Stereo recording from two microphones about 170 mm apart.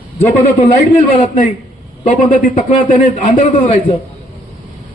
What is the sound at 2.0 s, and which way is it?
A man's voice, 40° left (ahead or behind).